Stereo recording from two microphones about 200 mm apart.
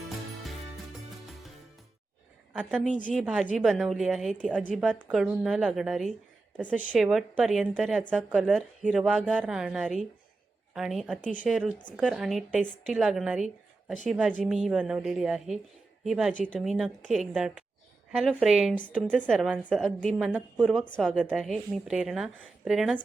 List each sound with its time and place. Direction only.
2.5 s a woman's voice: 5° right (ahead or behind)
12.6 s a woman's voice: 40° left (ahead or behind)
12.9 s a woman's voice: 5° right (ahead or behind)